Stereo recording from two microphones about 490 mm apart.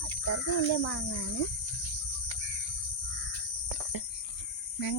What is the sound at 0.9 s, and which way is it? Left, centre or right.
Speech, left.